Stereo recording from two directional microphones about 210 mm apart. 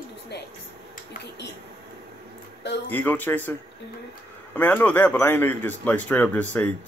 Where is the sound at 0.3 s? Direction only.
55° left (ahead or behind).